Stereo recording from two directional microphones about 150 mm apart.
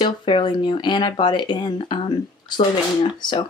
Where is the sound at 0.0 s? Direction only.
30° left (ahead or behind).